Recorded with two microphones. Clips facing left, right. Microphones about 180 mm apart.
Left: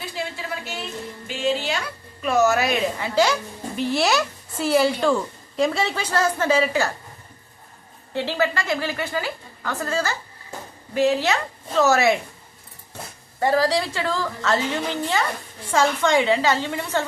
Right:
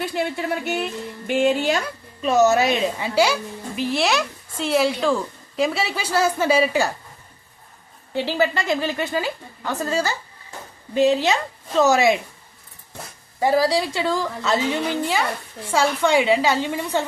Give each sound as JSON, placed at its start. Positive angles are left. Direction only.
{"t": 0.0, "sound": "speech", "side_deg": -65}
{"t": 2.2, "sound": "a woman's voice", "side_deg": -20}
{"t": 3.8, "sound": "speech", "side_deg": 0}
{"t": 8.1, "sound": "a woman's voice", "side_deg": -15}
{"t": 13.4, "sound": "a woman's voice", "side_deg": -10}